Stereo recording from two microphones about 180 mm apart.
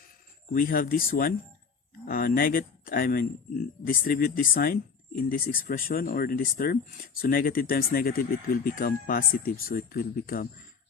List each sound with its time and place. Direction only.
0.5 s speech: 55° left (ahead or behind)